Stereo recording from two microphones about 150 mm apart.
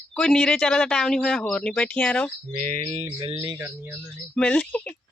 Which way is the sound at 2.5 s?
45° right (ahead or behind).